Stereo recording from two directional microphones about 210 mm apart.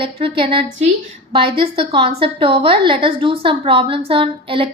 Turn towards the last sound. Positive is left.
turn(degrees=-25)  # may be behind; listen again after turning